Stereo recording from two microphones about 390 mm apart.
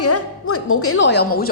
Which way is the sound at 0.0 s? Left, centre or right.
Left.